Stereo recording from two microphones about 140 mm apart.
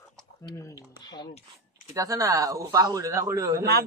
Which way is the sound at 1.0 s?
30° left (ahead or behind).